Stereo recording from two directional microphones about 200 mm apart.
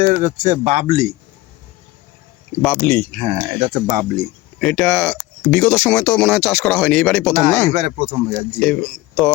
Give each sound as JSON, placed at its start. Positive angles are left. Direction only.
{"t": 0.0, "sound": "speech", "side_deg": -40}
{"t": 2.6, "sound": "speech", "side_deg": 5}
{"t": 3.2, "sound": "speech", "side_deg": -35}
{"t": 4.6, "sound": "speech", "side_deg": 5}
{"t": 7.7, "sound": "speech", "side_deg": -35}
{"t": 8.5, "sound": "speech", "side_deg": 5}